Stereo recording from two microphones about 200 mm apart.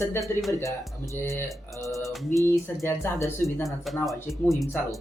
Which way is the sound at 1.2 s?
10° left (ahead or behind).